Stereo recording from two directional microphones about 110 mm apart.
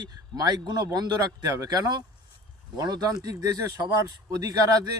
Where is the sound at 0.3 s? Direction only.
35° right (ahead or behind).